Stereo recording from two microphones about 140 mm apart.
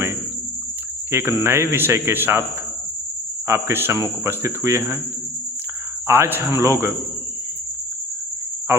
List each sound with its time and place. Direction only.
1.1 s speech: 15° right (ahead or behind)
3.4 s speech: 20° right (ahead or behind)
6.1 s speech: 15° right (ahead or behind)